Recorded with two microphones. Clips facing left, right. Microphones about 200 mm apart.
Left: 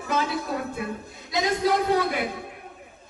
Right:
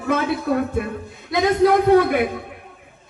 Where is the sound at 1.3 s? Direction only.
55° right (ahead or behind).